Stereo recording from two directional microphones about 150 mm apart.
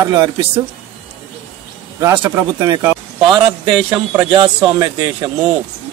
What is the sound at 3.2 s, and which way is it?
Speech, 35° right (ahead or behind).